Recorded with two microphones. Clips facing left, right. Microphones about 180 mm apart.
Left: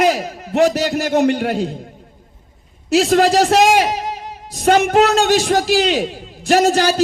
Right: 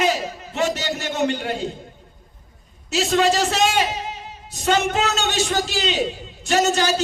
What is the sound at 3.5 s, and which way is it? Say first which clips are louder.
Music: left 7 dB; 70° left (ahead or behind).